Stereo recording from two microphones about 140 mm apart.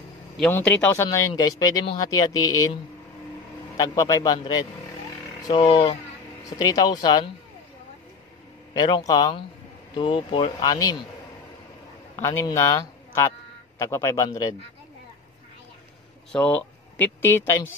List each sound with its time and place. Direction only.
0.5 s speech: 15° left (ahead or behind)
1.0 s a man's voice: 25° left (ahead or behind)
5.5 s speech: 35° left (ahead or behind)
6.6 s a man's voice: 25° left (ahead or behind)
8.8 s a man's voice: 30° left (ahead or behind)
12.2 s a man's voice: 20° left (ahead or behind)
16.3 s speech: 10° left (ahead or behind)